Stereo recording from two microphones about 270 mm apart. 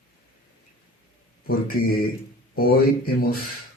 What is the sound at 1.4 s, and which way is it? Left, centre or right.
Speech, left.